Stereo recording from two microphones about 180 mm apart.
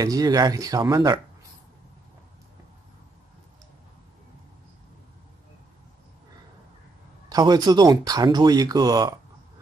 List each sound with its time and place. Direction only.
0.0 s speech: 20° right (ahead or behind)
7.2 s speech: 20° right (ahead or behind)